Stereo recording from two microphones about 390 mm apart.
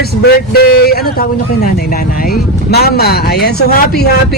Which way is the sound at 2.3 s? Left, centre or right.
Left.